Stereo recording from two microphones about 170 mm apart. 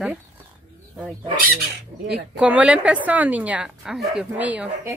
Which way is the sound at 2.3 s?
10° right (ahead or behind).